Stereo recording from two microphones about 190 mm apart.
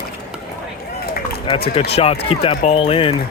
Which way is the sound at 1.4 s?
30° left (ahead or behind).